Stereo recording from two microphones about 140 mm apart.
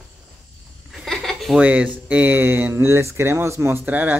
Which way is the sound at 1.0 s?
Centre (ahead or behind).